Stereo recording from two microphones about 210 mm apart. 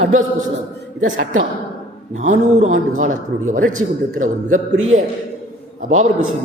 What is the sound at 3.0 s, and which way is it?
Speech, 35° right (ahead or behind).